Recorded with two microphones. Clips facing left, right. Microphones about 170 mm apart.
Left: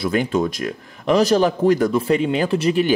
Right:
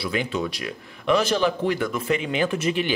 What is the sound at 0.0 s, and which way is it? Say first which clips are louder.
A man's voice: left 6 dB; 45° left (ahead or behind).